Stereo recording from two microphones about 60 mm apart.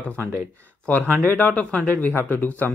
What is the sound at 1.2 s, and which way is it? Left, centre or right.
Speech, left.